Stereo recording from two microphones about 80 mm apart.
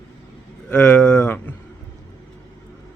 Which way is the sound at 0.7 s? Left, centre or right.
Centre.